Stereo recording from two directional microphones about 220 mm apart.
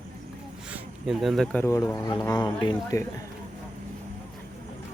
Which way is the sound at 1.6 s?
15° left (ahead or behind).